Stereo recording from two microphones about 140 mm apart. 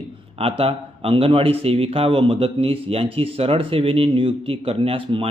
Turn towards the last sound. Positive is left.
turn(degrees=-40)  # may be behind; listen again after turning